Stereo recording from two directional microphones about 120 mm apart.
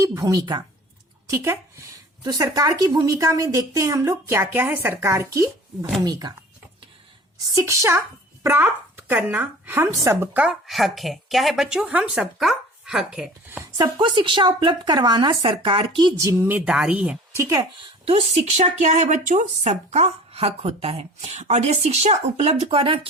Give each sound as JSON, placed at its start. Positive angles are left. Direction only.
{"t": 0.0, "sound": "a woman's voice", "side_deg": -25}
{"t": 1.3, "sound": "a woman's voice", "side_deg": -25}
{"t": 7.5, "sound": "a woman's voice", "side_deg": -25}
{"t": 10.3, "sound": "speech", "side_deg": -5}
{"t": 13.7, "sound": "a woman's voice", "side_deg": -35}
{"t": 16.1, "sound": "a woman's voice", "side_deg": -20}
{"t": 17.3, "sound": "a woman's voice", "side_deg": -25}
{"t": 18.0, "sound": "a woman's voice", "side_deg": -60}